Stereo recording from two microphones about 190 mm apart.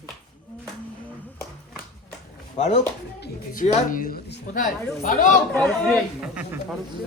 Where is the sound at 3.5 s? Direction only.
45° left (ahead or behind).